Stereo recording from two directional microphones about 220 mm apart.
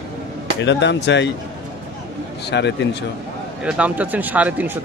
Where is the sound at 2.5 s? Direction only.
50° left (ahead or behind).